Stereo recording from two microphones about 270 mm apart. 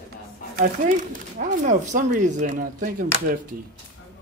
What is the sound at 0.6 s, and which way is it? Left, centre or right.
Speech, right.